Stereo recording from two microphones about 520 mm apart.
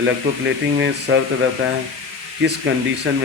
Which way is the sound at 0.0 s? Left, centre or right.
Right.